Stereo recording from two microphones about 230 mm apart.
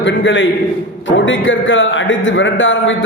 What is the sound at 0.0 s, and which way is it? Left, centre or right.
A man's voice, left.